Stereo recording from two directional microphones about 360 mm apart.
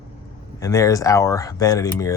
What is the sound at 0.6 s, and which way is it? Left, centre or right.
Speech, centre.